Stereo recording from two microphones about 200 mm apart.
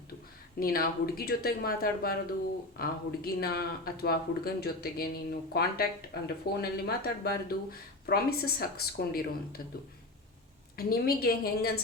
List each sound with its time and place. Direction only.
0.6 s speech: 45° left (ahead or behind)
10.8 s speech: 50° left (ahead or behind)